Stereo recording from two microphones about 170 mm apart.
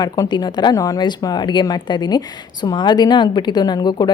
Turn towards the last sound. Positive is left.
turn(degrees=25)  # may be behind; listen again after turning